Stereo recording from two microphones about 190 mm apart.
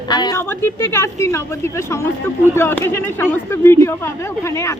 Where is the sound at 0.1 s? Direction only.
20° left (ahead or behind).